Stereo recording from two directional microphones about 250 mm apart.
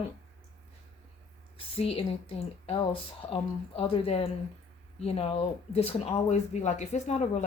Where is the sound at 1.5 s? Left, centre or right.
Left.